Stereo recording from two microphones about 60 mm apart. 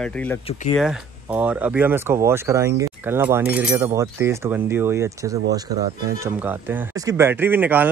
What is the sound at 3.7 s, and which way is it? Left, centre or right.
Speech, right.